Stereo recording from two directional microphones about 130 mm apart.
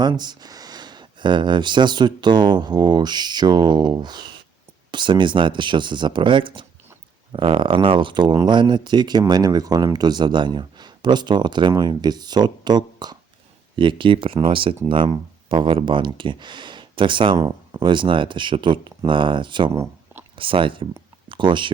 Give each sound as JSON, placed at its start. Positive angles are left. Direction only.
{"t": 0.0, "sound": "speech", "side_deg": -35}
{"t": 19.7, "sound": "a sound", "side_deg": -25}
{"t": 20.3, "sound": "speech", "side_deg": -40}